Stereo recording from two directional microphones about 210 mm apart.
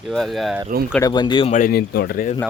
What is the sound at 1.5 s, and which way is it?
Speech, 40° left (ahead or behind).